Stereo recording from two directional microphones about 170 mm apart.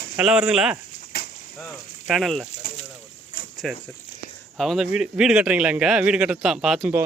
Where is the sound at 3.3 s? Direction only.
50° left (ahead or behind).